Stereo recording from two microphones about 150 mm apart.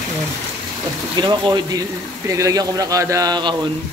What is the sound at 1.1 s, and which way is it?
Speech, 30° right (ahead or behind).